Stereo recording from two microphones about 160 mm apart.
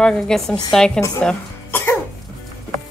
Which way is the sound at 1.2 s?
10° left (ahead or behind).